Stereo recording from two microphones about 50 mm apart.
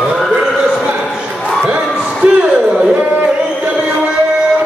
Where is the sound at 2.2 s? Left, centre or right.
Right.